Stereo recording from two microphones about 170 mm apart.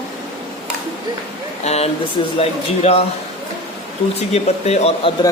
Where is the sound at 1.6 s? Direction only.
40° left (ahead or behind).